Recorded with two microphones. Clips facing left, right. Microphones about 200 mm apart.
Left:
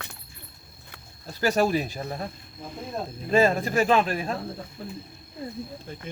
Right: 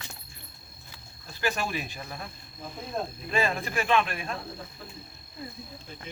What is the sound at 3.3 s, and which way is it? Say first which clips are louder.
Speech: left 9 dB; 40° left (ahead or behind).